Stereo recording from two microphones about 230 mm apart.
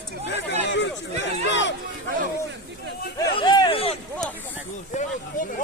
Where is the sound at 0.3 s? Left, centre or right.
Left.